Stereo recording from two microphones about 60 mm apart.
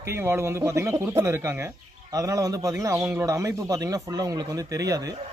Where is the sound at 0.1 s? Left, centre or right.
Right.